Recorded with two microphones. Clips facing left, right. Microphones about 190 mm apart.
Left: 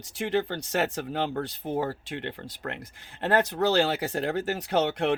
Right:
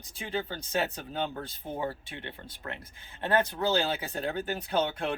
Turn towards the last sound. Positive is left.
turn(degrees=75)  # may be behind; listen again after turning